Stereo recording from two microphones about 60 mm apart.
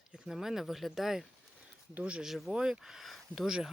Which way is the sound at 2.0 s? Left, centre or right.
Centre.